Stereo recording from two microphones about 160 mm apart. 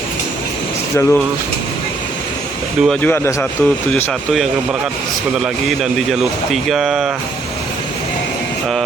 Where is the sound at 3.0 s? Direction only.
10° left (ahead or behind); by 7.1 s 5° right (ahead or behind).